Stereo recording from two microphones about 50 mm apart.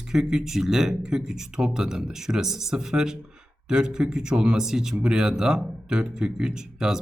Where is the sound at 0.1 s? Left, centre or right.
Centre.